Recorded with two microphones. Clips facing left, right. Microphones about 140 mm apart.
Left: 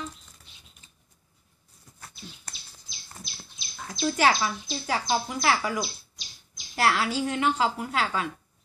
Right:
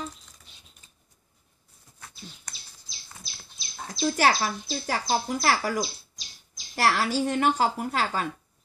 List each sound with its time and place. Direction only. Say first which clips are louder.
3.5 s speech: right 2 dB; 35° right (ahead or behind)